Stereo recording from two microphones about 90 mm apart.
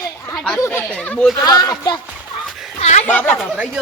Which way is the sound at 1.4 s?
45° left (ahead or behind).